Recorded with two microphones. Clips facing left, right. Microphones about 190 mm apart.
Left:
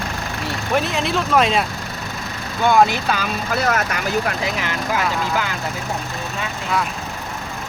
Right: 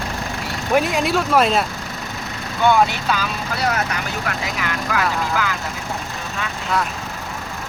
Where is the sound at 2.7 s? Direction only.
50° left (ahead or behind).